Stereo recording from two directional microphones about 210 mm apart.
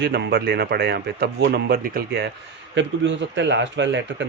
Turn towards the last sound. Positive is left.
turn(degrees=-60)  # may be behind; listen again after turning